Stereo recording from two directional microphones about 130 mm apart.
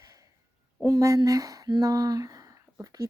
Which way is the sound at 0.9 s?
25° right (ahead or behind).